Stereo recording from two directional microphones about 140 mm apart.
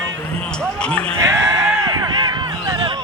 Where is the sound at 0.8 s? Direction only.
10° left (ahead or behind).